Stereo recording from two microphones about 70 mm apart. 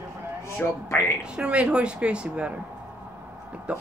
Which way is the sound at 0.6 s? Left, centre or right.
Left.